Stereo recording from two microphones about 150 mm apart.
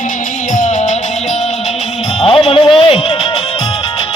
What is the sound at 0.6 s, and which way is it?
Music, 50° left (ahead or behind).